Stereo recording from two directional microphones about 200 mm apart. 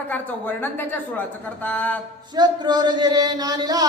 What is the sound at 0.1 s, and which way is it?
Speech, 10° left (ahead or behind).